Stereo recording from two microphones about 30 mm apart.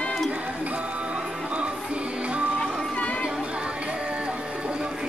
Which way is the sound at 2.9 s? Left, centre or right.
Left.